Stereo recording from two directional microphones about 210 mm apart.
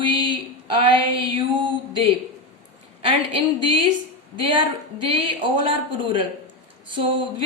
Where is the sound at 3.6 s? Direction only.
25° right (ahead or behind).